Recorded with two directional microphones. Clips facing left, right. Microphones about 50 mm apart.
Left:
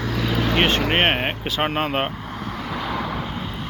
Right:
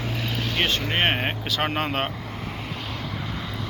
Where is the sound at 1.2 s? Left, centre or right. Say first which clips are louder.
Left 2 dB; centre.